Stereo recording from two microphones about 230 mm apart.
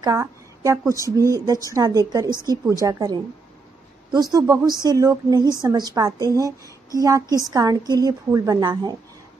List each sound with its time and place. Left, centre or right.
0.0 s a woman's voice: centre